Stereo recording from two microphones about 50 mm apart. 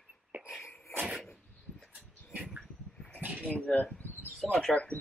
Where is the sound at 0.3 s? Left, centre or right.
Right.